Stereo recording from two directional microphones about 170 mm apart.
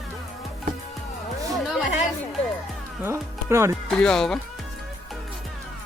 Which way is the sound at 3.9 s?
5° left (ahead or behind).